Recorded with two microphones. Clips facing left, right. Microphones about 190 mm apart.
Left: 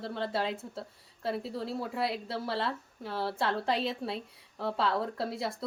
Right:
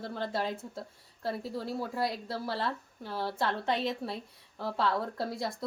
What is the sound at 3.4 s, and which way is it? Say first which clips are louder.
Speech: even; 30° left (ahead or behind).